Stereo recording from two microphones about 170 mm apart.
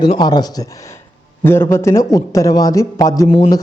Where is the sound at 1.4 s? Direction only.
15° left (ahead or behind).